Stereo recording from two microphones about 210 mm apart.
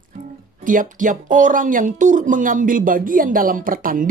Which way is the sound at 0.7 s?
40° right (ahead or behind).